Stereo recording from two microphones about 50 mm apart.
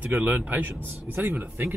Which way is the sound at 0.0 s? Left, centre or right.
Right.